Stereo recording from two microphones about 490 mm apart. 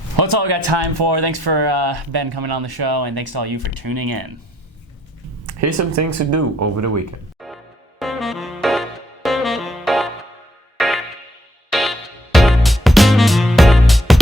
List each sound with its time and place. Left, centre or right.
0.2 s speech: right
5.5 s speech: right
7.3 s music: centre